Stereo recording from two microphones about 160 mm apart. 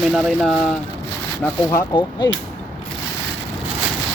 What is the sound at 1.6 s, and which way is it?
Speech, 20° left (ahead or behind).